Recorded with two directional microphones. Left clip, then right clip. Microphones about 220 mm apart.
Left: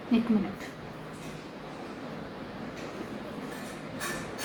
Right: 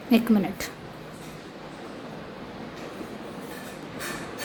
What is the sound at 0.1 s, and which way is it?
Speech, 50° right (ahead or behind).